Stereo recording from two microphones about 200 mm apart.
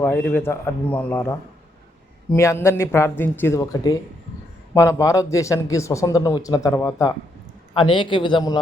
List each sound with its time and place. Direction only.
0.0 s a man's voice: 10° left (ahead or behind)